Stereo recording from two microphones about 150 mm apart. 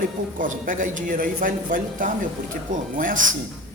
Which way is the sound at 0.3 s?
60° right (ahead or behind).